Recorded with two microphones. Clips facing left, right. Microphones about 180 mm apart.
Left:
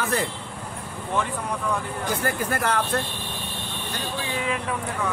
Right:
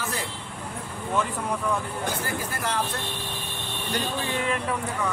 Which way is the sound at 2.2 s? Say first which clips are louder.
Left 5 dB; 60° left (ahead or behind).